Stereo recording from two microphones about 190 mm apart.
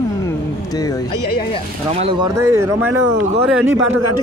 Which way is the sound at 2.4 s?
15° right (ahead or behind).